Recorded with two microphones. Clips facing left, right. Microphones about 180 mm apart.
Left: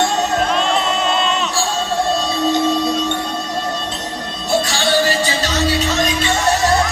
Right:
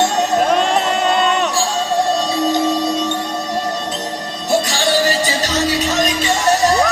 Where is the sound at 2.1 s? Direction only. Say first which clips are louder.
Right 1 dB; 15° right (ahead or behind).